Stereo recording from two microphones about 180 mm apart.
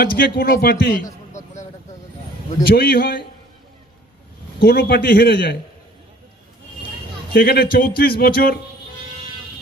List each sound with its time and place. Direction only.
0.0 s speech: 55° left (ahead or behind)
1.3 s a sound: 40° left (ahead or behind)
2.6 s speech: 55° left (ahead or behind)
4.6 s speech: 60° left (ahead or behind)
7.3 s speech: 60° left (ahead or behind)